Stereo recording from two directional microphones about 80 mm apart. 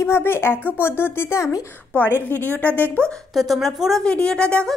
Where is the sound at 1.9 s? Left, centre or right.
Left.